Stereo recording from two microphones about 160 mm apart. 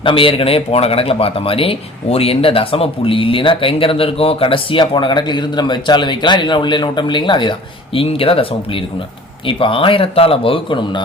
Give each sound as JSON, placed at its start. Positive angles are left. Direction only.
{"t": 0.0, "sound": "speech", "side_deg": 30}